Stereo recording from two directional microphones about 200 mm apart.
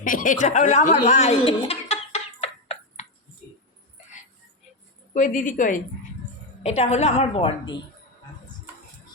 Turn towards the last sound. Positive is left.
turn(degrees=25)  # may be behind; listen again after turning